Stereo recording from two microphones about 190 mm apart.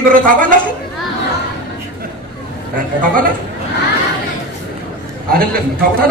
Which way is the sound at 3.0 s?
45° right (ahead or behind).